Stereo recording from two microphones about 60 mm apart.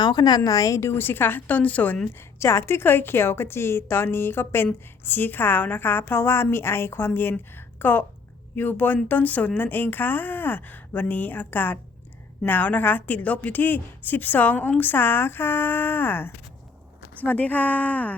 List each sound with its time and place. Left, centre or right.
0.3 s speech: left
0.8 s a woman's voice: left
2.1 s a woman's voice: left